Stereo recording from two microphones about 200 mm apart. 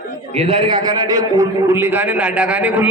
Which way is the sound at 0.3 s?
30° right (ahead or behind).